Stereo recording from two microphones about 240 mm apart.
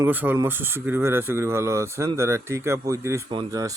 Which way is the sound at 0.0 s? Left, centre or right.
Centre.